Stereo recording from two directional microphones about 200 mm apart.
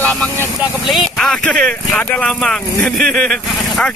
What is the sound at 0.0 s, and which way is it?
Speech, 5° left (ahead or behind).